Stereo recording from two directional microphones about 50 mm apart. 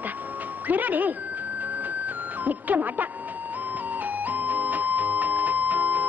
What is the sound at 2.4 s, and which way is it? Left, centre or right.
Speech, right.